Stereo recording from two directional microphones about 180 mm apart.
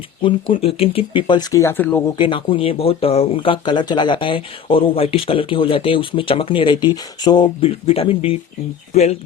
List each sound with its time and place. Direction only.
0.2 s speech: 30° left (ahead or behind); by 2.0 s 10° left (ahead or behind)
2.1 s speech: 25° left (ahead or behind)